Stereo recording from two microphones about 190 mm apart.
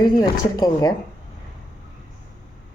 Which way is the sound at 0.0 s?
20° left (ahead or behind).